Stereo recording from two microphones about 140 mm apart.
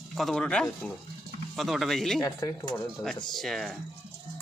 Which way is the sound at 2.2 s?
20° left (ahead or behind).